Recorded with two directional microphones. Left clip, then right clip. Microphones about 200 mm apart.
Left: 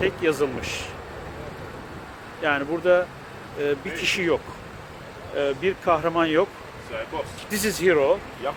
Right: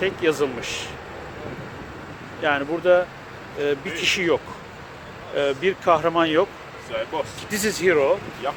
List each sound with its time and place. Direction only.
0.0 s speech: 5° right (ahead or behind)
2.4 s speech: centre (ahead or behind)
6.9 s speech: 35° right (ahead or behind)
7.5 s speech: 10° left (ahead or behind)
8.4 s speech: 20° right (ahead or behind)